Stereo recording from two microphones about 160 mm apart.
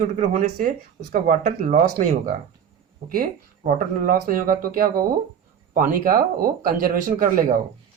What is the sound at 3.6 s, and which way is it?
Speech, 60° right (ahead or behind).